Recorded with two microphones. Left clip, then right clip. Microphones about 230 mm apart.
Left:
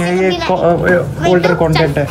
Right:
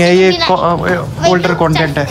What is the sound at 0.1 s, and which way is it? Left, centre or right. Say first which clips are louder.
Speech: right 5 dB; centre.